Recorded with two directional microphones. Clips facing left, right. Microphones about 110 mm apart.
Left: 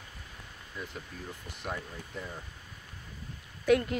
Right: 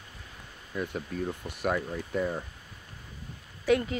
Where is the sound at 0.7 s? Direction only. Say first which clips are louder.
Right 9 dB; 60° right (ahead or behind).